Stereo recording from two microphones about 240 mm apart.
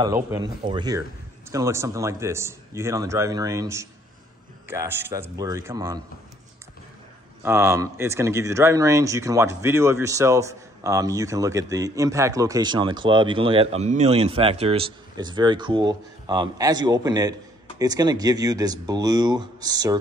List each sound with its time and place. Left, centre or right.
0.0 s speech: centre
7.4 s speech: centre